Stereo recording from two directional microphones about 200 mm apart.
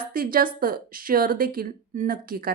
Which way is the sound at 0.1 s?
45° right (ahead or behind).